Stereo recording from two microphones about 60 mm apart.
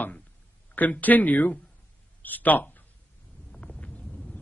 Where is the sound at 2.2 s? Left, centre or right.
Left.